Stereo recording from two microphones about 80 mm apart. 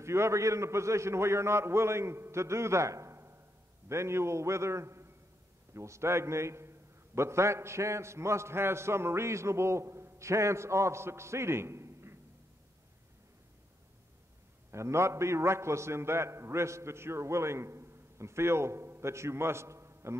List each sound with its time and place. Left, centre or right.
0.0 s a man's voice: right
14.7 s a man's voice: right